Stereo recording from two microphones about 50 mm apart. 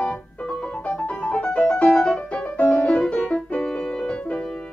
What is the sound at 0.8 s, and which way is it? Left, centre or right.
Music, left.